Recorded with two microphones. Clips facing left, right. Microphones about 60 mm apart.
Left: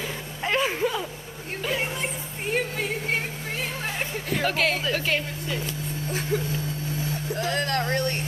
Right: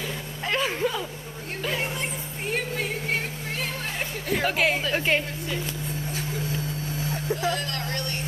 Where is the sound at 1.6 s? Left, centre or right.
Centre.